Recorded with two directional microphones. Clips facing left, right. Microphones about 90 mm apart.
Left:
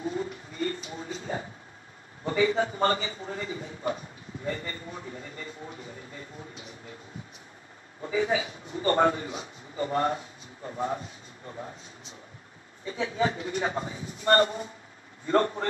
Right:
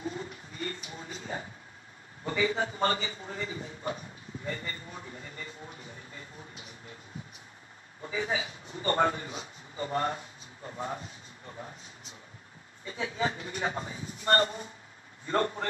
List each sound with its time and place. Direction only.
0.0 s a sound: 35° left (ahead or behind)
2.2 s a man's voice: 35° left (ahead or behind)
8.0 s a man's voice: 35° left (ahead or behind)